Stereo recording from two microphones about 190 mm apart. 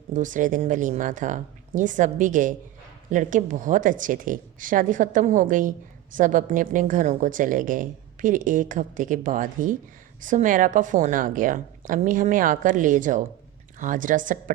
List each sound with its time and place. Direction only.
0.1 s a woman's voice: 40° right (ahead or behind)